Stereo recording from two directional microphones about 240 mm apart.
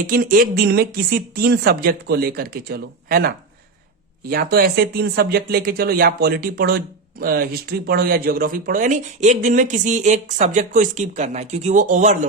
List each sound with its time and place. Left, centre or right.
0.1 s speech: right